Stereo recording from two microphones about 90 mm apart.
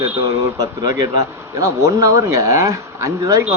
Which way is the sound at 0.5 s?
45° right (ahead or behind).